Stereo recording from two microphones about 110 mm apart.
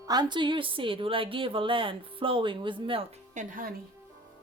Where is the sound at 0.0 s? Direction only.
40° right (ahead or behind); by 3.4 s 65° right (ahead or behind).